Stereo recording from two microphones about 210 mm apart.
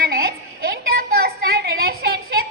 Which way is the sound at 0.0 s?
45° right (ahead or behind).